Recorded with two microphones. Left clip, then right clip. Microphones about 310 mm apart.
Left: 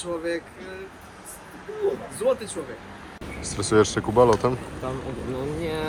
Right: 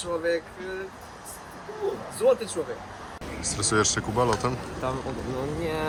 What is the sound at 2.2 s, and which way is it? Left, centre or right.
Speech, right.